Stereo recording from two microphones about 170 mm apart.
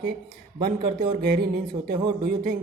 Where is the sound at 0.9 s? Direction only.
70° right (ahead or behind).